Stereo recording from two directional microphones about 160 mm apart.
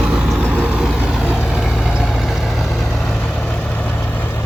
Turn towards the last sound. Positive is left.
turn(degrees=0)  # may be behind; listen again after turning